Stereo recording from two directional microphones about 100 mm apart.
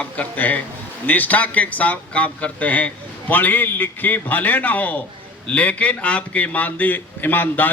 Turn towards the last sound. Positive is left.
turn(degrees=20)  # may be behind; listen again after turning